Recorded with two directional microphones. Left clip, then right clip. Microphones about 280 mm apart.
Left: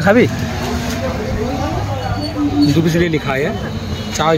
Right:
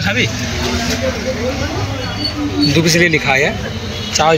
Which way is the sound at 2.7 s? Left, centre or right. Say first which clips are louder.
Right 4 dB; centre.